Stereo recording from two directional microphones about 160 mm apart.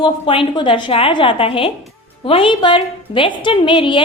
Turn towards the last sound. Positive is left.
turn(degrees=30)  # may be behind; listen again after turning